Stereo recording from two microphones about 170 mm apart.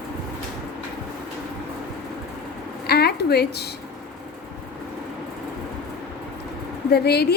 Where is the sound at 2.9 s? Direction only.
70° left (ahead or behind).